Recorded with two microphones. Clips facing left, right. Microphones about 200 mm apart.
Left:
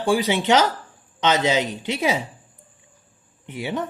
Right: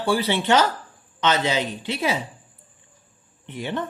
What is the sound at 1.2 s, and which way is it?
Speech, 25° left (ahead or behind).